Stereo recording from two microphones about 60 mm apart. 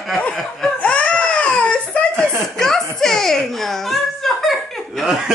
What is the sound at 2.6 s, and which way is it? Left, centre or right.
Giggle, centre.